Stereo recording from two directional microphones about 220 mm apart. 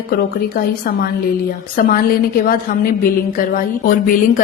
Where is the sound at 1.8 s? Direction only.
40° left (ahead or behind).